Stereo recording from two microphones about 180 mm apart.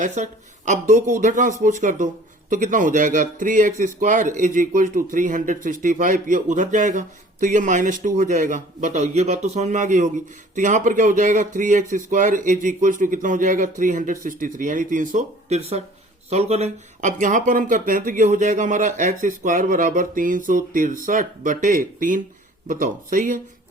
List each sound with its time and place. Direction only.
0.0 s a man's voice: 45° right (ahead or behind)